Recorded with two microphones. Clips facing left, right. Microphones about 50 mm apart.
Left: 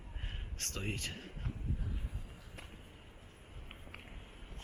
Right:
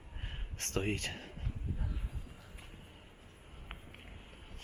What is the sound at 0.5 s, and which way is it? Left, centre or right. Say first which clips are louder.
Speech: right 6 dB; right.